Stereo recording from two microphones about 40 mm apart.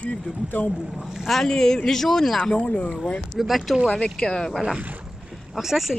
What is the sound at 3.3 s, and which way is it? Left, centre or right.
Speech, centre.